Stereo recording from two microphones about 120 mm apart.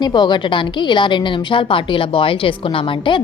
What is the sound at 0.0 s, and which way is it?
A woman's voice, 40° left (ahead or behind).